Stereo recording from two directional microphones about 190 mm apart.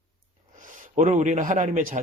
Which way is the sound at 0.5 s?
45° right (ahead or behind).